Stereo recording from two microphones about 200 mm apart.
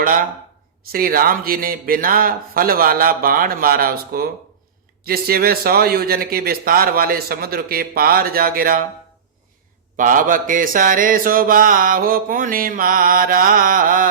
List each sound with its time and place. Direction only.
0.0 s mantra: 45° right (ahead or behind)
10.0 s mantra: 40° right (ahead or behind)